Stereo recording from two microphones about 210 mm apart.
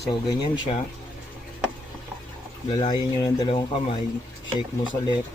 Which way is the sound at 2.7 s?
20° left (ahead or behind).